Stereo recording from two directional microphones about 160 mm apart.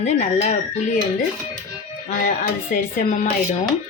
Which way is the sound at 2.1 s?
60° left (ahead or behind).